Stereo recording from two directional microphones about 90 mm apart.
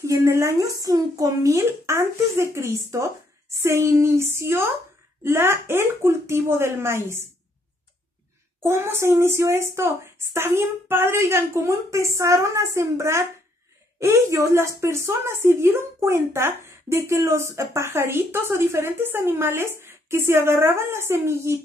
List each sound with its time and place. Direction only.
0.0 s a child's voice: 35° right (ahead or behind)
8.6 s a child's voice: 30° right (ahead or behind)